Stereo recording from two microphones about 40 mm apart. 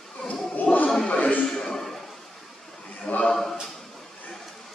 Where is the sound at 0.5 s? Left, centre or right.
Left.